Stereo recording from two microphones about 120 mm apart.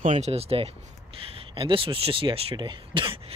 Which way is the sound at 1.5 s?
45° right (ahead or behind).